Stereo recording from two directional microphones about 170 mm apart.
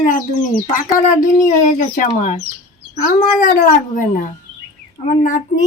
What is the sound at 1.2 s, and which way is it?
Speech, 50° left (ahead or behind).